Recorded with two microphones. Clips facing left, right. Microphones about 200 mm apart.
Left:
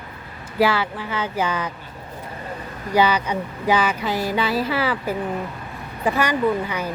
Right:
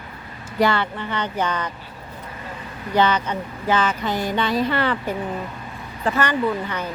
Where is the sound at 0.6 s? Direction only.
5° left (ahead or behind).